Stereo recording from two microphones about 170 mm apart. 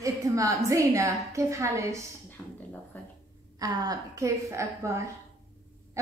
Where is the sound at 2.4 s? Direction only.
10° left (ahead or behind).